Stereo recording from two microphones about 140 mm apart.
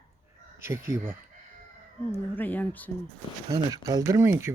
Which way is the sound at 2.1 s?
15° left (ahead or behind).